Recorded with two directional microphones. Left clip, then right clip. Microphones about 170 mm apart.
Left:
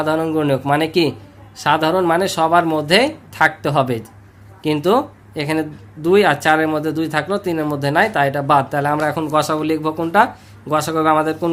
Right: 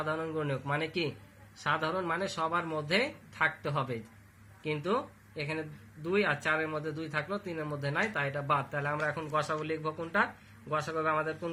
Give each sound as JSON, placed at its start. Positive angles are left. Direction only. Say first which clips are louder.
{"t": 0.0, "sound": "speech", "louder": "left 16 dB", "side_deg": 45}
{"t": 4.6, "sound": "speech", "louder": "left 16 dB", "side_deg": 55}